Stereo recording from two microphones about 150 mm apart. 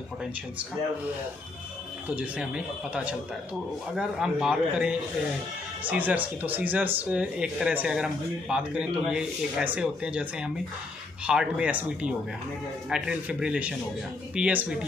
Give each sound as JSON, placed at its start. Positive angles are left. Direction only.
{"t": 2.0, "sound": "speech", "side_deg": -10}